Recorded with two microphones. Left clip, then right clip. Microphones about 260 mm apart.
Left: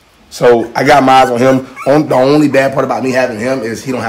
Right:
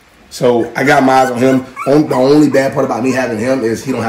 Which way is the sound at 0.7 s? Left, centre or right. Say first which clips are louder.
Left 3 dB; left.